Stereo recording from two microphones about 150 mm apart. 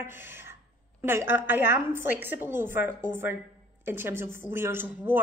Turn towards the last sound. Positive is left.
turn(degrees=-15)  # may be behind; listen again after turning